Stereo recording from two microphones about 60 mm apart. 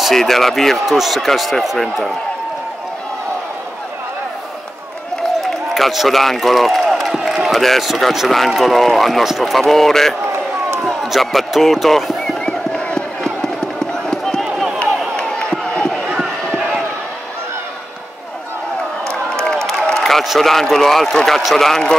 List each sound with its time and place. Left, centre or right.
0.0 s speech: centre
5.4 s a man's voice: centre
12.2 s music: centre
13.9 s a sound: centre
19.4 s a man's voice: centre